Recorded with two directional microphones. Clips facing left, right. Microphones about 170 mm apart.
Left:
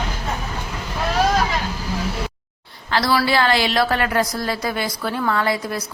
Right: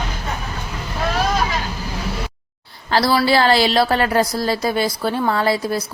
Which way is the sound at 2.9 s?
30° right (ahead or behind).